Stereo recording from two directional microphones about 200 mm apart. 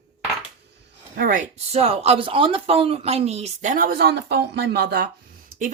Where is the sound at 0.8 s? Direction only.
45° right (ahead or behind).